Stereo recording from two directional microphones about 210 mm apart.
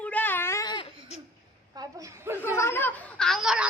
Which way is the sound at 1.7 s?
15° right (ahead or behind).